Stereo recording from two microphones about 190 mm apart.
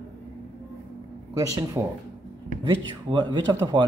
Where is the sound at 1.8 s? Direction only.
10° right (ahead or behind).